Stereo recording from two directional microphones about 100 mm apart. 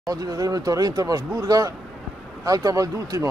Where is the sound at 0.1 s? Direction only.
35° right (ahead or behind).